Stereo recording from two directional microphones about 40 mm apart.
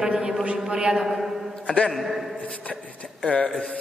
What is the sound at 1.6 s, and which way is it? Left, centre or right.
Speech, left.